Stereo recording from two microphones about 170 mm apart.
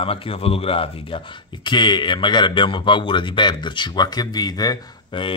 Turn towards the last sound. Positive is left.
turn(degrees=25)  # may be behind; listen again after turning